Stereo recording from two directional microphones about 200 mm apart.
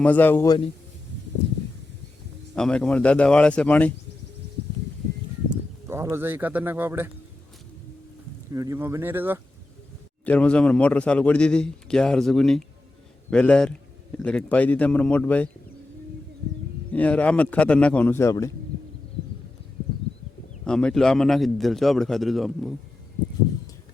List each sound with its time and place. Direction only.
0.0 s a man's voice: 10° left (ahead or behind)
2.6 s a man's voice: 5° left (ahead or behind)
5.9 s speech: 15° right (ahead or behind)
8.5 s speech: 15° right (ahead or behind)
10.2 s a man's voice: 5° left (ahead or behind)
16.9 s a man's voice: 5° left (ahead or behind)
20.7 s a man's voice: 5° left (ahead or behind)